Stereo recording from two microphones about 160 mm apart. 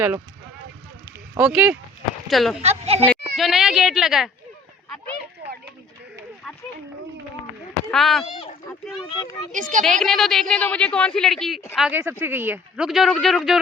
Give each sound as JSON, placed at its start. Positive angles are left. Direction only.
{"t": 1.4, "sound": "speech", "side_deg": -10}
{"t": 2.6, "sound": "speech", "side_deg": -40}
{"t": 3.1, "sound": "speech", "side_deg": 0}
{"t": 7.9, "sound": "speech", "side_deg": 0}
{"t": 9.5, "sound": "a child's voice", "side_deg": -50}
{"t": 9.8, "sound": "a woman's voice", "side_deg": 0}
{"t": 11.8, "sound": "speech", "side_deg": -10}